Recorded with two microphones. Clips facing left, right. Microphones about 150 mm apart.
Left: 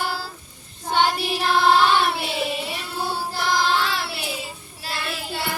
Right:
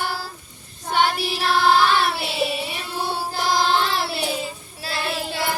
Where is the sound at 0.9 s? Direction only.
5° right (ahead or behind).